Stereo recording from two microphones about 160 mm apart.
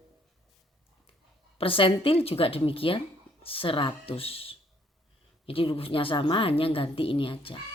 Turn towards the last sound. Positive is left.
turn(degrees=35)  # may be behind; listen again after turning